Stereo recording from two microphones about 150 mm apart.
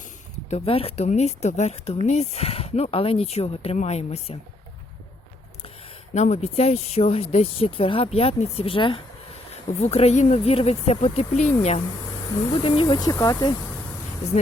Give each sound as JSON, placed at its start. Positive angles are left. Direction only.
{"t": 0.5, "sound": "speech", "side_deg": 40}
{"t": 6.1, "sound": "speech", "side_deg": 50}
{"t": 12.6, "sound": "speech", "side_deg": 35}